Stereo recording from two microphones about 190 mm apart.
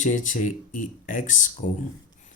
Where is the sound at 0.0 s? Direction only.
40° left (ahead or behind).